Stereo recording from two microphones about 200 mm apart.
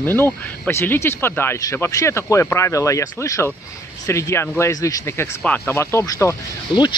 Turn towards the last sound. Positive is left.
turn(degrees=20)  # may be behind; listen again after turning